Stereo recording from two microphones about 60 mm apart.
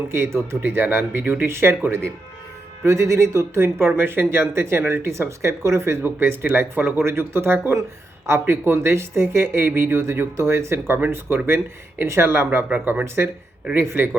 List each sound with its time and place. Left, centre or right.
0.1 s speech: right
6.0 s speech: right